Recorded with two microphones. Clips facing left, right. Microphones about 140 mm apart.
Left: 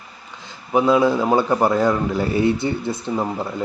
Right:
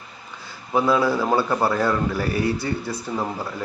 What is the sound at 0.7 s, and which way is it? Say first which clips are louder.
A man's voice: left 4 dB; 20° left (ahead or behind).